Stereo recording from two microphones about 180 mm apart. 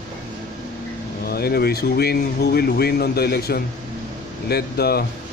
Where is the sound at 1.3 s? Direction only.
60° left (ahead or behind).